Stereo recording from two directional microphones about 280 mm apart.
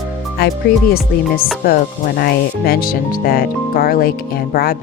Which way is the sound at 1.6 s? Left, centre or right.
Left.